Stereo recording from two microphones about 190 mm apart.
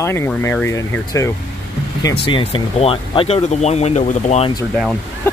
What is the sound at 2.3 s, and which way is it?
Speech, 25° left (ahead or behind).